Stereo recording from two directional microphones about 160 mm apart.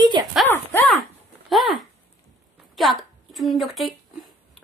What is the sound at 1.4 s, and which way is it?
Speech, centre (ahead or behind).